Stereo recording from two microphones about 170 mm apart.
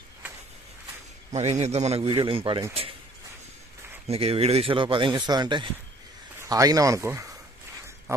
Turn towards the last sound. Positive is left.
turn(degrees=-20)  # may be behind; listen again after turning